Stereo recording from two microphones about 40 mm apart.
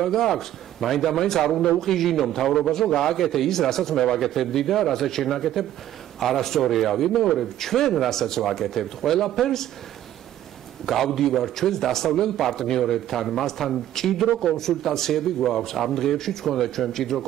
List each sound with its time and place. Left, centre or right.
0.0 s a man's voice: centre
10.9 s a man's voice: centre